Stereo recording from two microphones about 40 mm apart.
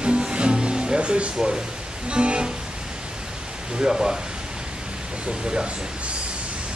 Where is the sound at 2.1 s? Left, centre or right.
Right.